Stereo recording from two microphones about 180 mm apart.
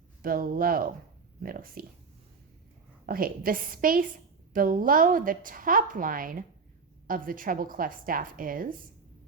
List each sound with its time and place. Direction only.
0.2 s a woman's voice: 50° right (ahead or behind)
3.1 s a woman's voice: 50° right (ahead or behind)